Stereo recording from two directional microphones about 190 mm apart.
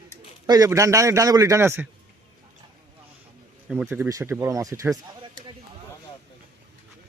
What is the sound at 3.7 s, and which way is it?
A man's voice, 5° right (ahead or behind).